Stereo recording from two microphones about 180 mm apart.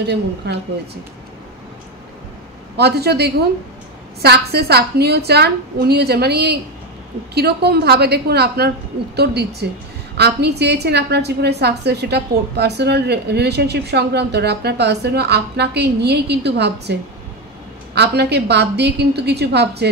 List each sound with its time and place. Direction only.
0.0 s a woman's voice: 70° right (ahead or behind)
2.8 s a woman's voice: 65° right (ahead or behind)
17.9 s a woman's voice: 65° right (ahead or behind)